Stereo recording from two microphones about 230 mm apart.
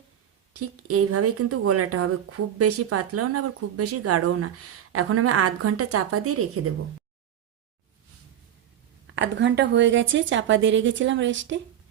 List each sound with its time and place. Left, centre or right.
0.5 s speech: right
9.1 s a woman's voice: right